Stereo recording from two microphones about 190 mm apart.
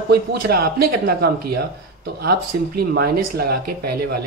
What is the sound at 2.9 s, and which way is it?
Speech, 55° right (ahead or behind).